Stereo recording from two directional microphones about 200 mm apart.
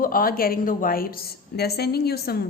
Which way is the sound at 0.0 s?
45° left (ahead or behind).